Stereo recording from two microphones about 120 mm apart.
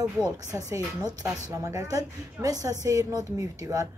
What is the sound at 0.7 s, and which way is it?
Speech, 30° right (ahead or behind).